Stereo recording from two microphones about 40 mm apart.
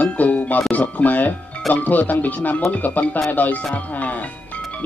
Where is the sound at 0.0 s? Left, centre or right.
Left.